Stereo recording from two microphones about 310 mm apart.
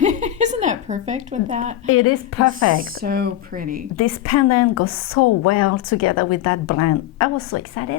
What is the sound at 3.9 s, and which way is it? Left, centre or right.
A woman's voice, left.